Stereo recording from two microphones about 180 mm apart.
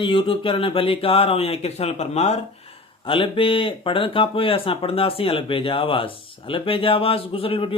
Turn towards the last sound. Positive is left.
turn(degrees=30)  # may be behind; listen again after turning